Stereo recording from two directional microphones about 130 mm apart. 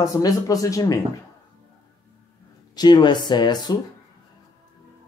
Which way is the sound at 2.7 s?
30° left (ahead or behind).